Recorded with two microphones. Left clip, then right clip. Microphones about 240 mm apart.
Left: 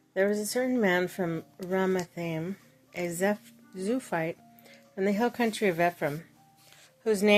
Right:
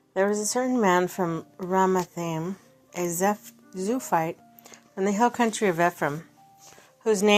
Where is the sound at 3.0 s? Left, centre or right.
Centre.